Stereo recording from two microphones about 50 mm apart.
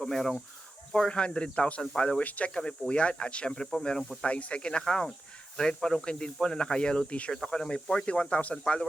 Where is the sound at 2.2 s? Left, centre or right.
Left.